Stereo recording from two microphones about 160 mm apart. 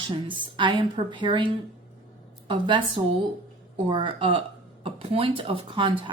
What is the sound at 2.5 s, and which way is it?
Speech, 30° right (ahead or behind).